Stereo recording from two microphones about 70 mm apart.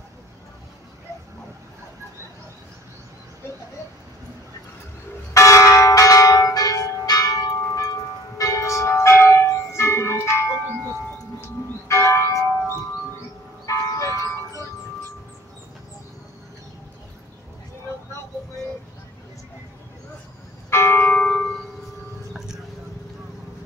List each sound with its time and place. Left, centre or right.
5.3 s church bell: left
11.9 s church bell: left
13.7 s music: left
20.7 s church bell: left
21.2 s a sound: centre